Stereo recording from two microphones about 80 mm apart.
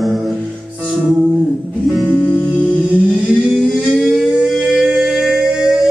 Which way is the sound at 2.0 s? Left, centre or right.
Centre.